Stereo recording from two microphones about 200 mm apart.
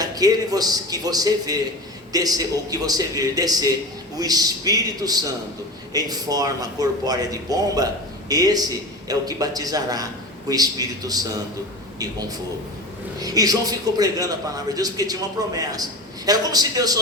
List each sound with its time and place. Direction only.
0.0 s a man's voice: 20° right (ahead or behind)
13.1 s a man's voice: 20° right (ahead or behind)